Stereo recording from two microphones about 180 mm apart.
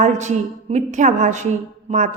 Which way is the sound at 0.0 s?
40° right (ahead or behind).